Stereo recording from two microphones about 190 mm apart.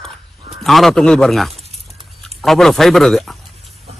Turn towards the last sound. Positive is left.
turn(degrees=0)  # may be behind; listen again after turning